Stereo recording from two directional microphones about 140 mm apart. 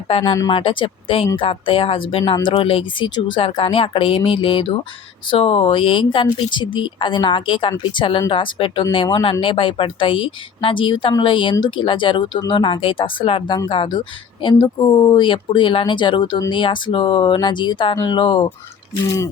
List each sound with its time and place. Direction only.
0.1 s speech: 35° left (ahead or behind)
19.0 s speech: 20° left (ahead or behind)